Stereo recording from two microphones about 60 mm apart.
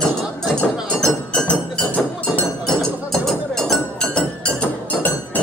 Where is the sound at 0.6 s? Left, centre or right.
Centre.